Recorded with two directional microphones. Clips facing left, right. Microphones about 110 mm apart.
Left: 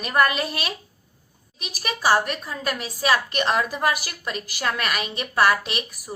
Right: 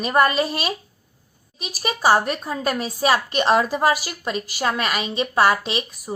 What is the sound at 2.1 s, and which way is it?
A woman's voice, 35° right (ahead or behind).